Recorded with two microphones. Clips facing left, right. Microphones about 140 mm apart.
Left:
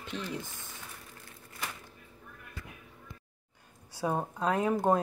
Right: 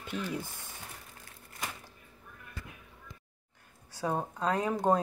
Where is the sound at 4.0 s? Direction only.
10° left (ahead or behind).